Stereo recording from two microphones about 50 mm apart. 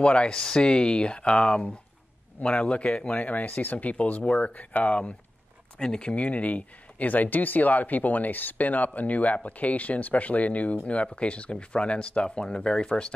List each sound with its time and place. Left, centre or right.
0.0 s speech: left
5.8 s speech: centre